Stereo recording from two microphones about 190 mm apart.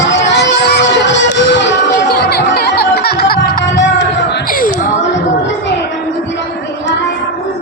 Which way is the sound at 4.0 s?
65° left (ahead or behind).